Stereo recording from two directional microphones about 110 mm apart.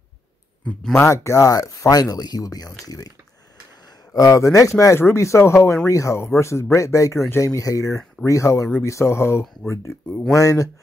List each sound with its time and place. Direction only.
1.0 s speech: 25° left (ahead or behind)
4.1 s speech: 30° left (ahead or behind)
10.0 s speech: 10° left (ahead or behind)
10.3 s speech: 30° left (ahead or behind)